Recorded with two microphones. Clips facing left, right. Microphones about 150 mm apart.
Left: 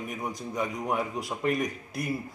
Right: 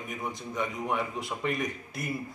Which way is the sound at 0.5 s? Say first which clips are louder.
Left 1 dB; 40° left (ahead or behind).